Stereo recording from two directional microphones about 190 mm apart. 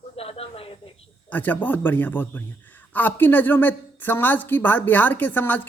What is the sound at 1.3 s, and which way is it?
A man's voice, 10° left (ahead or behind).